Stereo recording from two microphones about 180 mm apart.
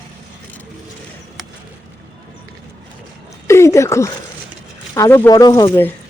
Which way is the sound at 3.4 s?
15° left (ahead or behind).